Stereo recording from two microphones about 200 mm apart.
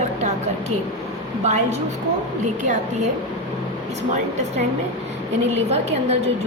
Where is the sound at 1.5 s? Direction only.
35° right (ahead or behind).